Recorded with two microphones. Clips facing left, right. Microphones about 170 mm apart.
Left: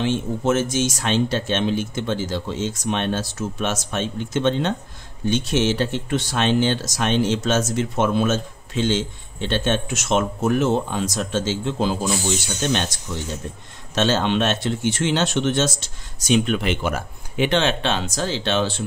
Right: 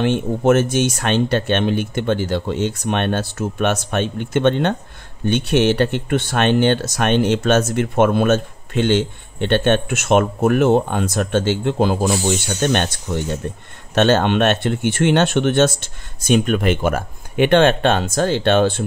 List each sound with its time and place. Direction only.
0.0 s speech: 60° right (ahead or behind)